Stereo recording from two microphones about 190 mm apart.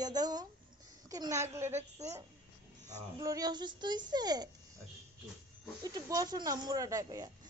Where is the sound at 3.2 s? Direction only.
20° right (ahead or behind).